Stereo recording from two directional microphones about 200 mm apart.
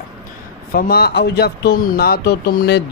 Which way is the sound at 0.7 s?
50° left (ahead or behind).